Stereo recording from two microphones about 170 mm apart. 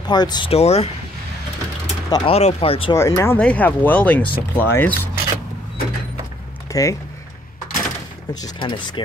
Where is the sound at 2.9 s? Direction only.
15° left (ahead or behind).